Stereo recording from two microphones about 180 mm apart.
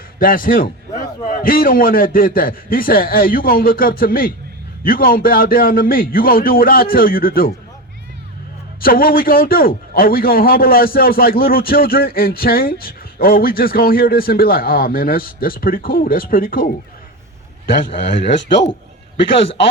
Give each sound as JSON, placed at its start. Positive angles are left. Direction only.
{"t": 0.2, "sound": "a man's voice", "side_deg": 50}
{"t": 0.9, "sound": "a sound", "side_deg": 25}
{"t": 1.4, "sound": "a man's voice", "side_deg": 50}
{"t": 8.8, "sound": "a man's voice", "side_deg": 55}